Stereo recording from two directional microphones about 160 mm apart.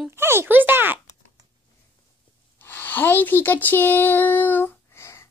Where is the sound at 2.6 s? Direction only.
10° left (ahead or behind).